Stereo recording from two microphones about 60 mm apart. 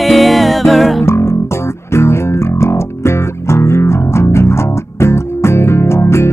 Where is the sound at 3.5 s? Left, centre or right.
Left.